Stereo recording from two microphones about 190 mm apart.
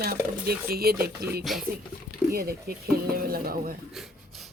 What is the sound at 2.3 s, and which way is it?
Speech, 50° right (ahead or behind).